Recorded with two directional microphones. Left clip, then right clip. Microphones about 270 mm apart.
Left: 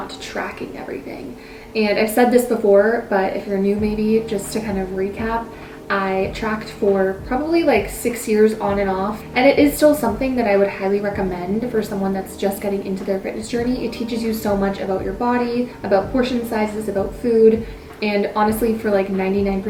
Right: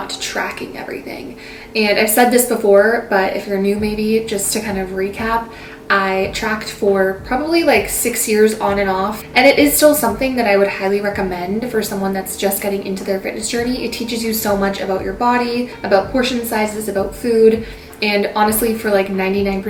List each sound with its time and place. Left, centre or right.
1.7 s a woman's voice: centre
2.7 s speech: centre
3.1 s a woman's voice: centre